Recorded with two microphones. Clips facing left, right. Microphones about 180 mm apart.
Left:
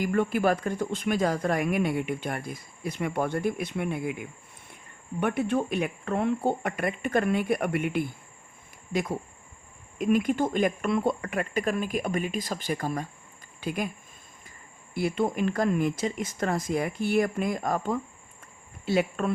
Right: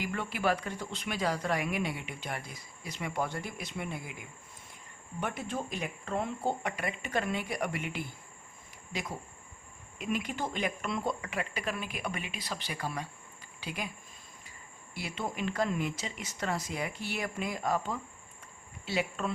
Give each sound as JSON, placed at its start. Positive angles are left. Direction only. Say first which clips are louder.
{"t": 0.0, "sound": "speech", "louder": "left 8 dB", "side_deg": 45}
{"t": 5.2, "sound": "speech", "louder": "left 10 dB", "side_deg": 60}
{"t": 14.9, "sound": "speech", "louder": "left 10 dB", "side_deg": 50}